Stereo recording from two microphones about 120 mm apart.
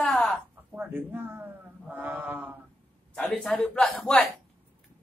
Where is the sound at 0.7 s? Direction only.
15° right (ahead or behind).